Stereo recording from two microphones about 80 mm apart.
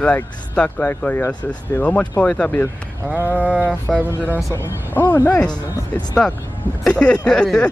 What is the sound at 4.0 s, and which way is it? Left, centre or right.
Speech, right.